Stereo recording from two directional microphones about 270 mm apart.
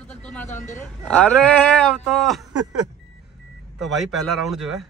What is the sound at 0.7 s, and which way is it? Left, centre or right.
A man's voice, centre.